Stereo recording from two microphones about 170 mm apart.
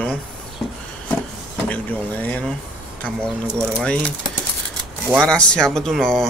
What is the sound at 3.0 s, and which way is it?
Speech, 5° left (ahead or behind).